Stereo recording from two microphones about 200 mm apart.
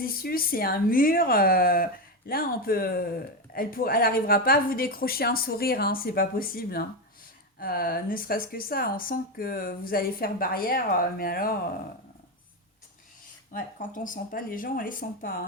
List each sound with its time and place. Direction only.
0.0 s speech: 50° left (ahead or behind)
13.5 s speech: 40° left (ahead or behind)